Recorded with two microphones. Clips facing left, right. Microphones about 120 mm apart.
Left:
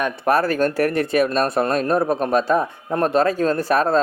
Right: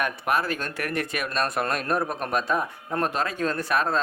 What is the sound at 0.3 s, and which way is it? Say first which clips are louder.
Speech: left 11 dB; 40° left (ahead or behind).